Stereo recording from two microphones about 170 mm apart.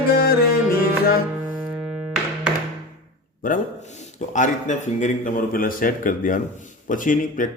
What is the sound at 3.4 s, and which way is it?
A man's voice, 55° left (ahead or behind).